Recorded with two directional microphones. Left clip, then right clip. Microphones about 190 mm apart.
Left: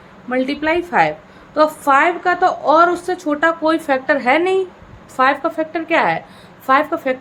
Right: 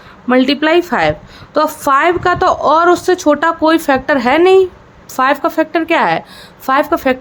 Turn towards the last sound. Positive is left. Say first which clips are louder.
# right 3 dB
turn(degrees=-40)  # may be behind; listen again after turning